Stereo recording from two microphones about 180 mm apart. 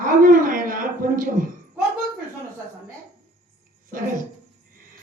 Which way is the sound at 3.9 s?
50° right (ahead or behind).